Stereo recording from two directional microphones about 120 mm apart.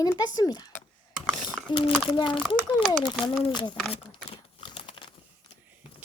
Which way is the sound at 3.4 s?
40° left (ahead or behind).